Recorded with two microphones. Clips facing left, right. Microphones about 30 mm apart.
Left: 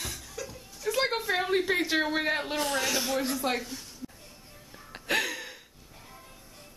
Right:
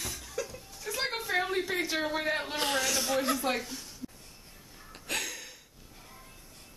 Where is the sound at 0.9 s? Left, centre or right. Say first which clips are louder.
Left 4 dB; centre.